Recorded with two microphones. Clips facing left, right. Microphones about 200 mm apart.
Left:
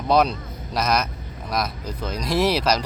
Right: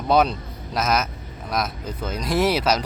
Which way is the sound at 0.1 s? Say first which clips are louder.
Even; centre (ahead or behind).